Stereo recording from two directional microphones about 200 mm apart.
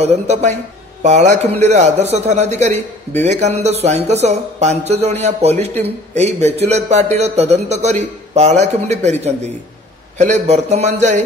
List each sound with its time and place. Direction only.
0.0 s a man's voice: 35° right (ahead or behind)